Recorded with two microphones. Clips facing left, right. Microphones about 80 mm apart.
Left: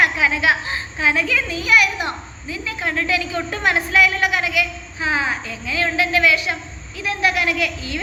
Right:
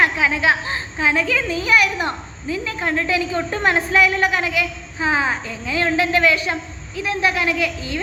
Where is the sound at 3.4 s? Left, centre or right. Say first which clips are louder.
Right 2 dB; right.